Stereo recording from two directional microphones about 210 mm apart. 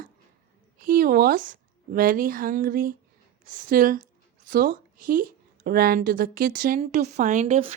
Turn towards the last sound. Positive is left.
turn(degrees=-30)  # may be behind; listen again after turning